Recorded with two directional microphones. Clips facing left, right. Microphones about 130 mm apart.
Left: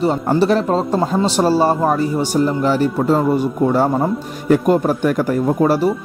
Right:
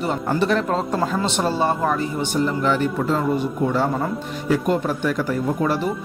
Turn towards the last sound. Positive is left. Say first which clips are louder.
# left 6 dB
turn(degrees=40)  # may be behind; listen again after turning